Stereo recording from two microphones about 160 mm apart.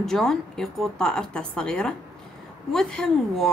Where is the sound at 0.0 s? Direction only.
Centre (ahead or behind).